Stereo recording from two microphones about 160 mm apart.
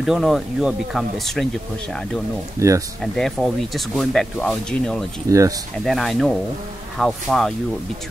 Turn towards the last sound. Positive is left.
turn(degrees=0)  # may be behind; listen again after turning